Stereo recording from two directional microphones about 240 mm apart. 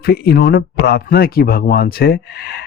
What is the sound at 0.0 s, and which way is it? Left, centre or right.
Speech, left.